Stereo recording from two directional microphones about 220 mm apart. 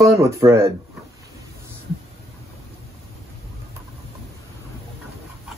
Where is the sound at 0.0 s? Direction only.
15° right (ahead or behind).